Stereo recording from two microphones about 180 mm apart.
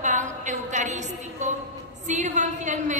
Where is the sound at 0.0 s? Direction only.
45° right (ahead or behind).